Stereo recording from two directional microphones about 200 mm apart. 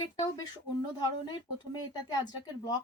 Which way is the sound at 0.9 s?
20° left (ahead or behind).